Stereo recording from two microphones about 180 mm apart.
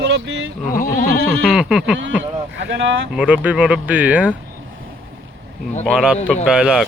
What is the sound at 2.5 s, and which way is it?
Speech, 85° right.